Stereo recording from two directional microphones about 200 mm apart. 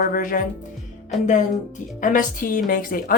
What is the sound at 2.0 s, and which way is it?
Speech, 40° left (ahead or behind).